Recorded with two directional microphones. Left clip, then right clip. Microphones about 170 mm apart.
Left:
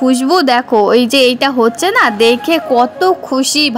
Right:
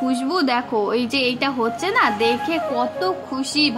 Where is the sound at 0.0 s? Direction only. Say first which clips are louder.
Left 10 dB; 45° left (ahead or behind).